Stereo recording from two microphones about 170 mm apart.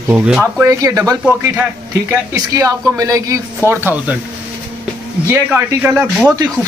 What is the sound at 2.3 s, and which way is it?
Speech, 20° right (ahead or behind).